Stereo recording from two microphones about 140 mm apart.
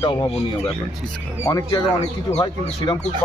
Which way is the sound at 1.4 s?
25° left (ahead or behind).